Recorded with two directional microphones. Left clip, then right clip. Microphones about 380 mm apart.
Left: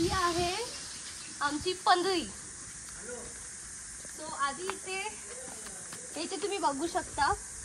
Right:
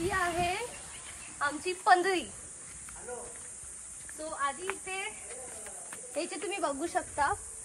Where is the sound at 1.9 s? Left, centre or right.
Centre.